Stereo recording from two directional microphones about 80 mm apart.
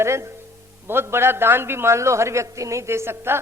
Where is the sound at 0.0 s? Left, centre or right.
Right.